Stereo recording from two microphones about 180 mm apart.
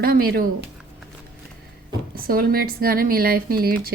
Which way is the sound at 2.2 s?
55° right (ahead or behind).